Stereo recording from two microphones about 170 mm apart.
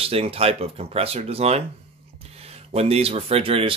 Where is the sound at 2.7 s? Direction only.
35° right (ahead or behind).